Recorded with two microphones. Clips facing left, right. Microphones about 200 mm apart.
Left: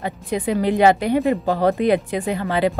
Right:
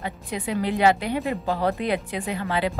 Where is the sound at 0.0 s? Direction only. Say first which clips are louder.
Left 7 dB; 45° left (ahead or behind).